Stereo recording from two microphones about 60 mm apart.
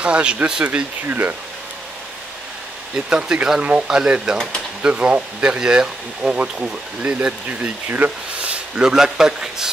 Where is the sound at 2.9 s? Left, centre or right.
Centre.